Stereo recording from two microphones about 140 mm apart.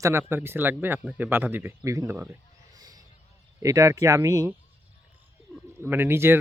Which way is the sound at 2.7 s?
25° right (ahead or behind).